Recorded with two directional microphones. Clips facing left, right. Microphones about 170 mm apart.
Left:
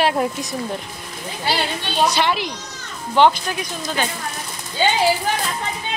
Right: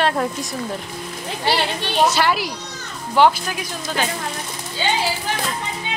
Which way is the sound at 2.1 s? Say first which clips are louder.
Right 1 dB; 5° right (ahead or behind).